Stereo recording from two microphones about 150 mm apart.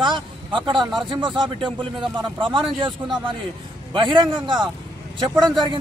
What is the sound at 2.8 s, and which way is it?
A man's voice, 35° right (ahead or behind).